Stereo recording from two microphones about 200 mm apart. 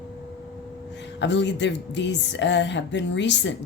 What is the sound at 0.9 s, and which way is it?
Speech, 60° left (ahead or behind).